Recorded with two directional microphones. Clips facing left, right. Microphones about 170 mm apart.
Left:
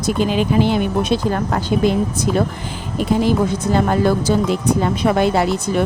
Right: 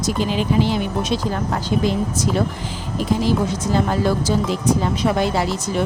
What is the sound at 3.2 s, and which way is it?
Speech, 60° left (ahead or behind).